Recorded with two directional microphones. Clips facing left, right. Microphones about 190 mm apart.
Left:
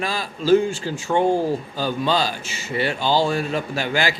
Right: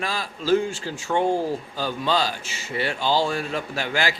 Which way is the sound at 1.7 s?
15° left (ahead or behind).